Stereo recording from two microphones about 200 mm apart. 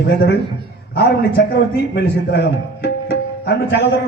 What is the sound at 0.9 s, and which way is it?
A man's voice, 55° left (ahead or behind).